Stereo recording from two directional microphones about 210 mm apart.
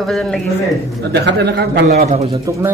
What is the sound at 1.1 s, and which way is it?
Speech, 50° right (ahead or behind).